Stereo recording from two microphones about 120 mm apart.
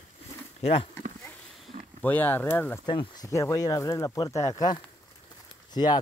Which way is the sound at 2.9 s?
40° left (ahead or behind).